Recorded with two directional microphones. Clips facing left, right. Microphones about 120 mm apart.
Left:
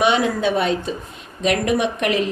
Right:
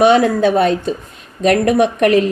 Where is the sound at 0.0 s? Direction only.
45° right (ahead or behind).